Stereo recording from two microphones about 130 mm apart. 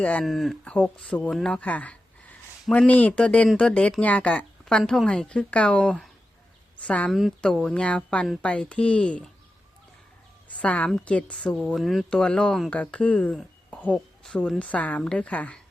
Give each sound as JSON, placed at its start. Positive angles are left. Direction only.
{"t": 0.0, "sound": "a woman's voice", "side_deg": 10}
{"t": 7.1, "sound": "a woman's voice", "side_deg": 0}
{"t": 10.5, "sound": "a woman's voice", "side_deg": 10}